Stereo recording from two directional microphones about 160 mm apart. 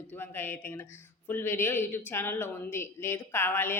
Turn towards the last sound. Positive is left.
turn(degrees=15)  # may be behind; listen again after turning